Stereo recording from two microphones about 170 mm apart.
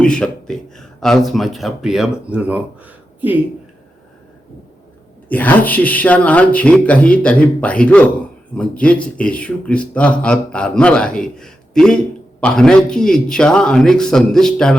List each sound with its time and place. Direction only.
0.0 s speech: 5° left (ahead or behind)
5.3 s speech: 10° left (ahead or behind)